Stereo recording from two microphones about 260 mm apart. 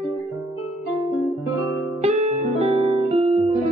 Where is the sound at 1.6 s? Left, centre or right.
Left.